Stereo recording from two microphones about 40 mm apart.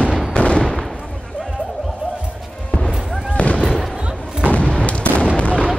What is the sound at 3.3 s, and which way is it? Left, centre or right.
Fireworks, left.